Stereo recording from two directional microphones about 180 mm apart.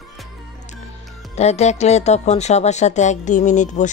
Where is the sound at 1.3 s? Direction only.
35° left (ahead or behind).